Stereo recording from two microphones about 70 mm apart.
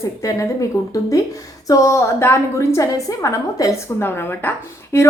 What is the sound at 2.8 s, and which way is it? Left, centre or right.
Speech, left.